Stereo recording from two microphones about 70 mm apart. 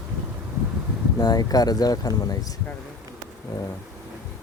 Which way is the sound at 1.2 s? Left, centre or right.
Left.